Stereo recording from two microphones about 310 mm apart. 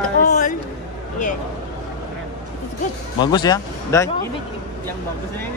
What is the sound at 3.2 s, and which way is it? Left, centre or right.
Speech, centre.